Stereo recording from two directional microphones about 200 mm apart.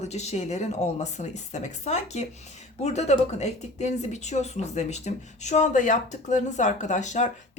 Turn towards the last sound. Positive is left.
turn(degrees=35)  # may be behind; listen again after turning